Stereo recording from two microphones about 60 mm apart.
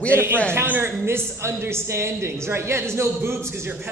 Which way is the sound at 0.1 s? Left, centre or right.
Right.